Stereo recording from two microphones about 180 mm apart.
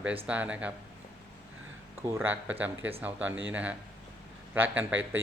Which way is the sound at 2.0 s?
15° right (ahead or behind).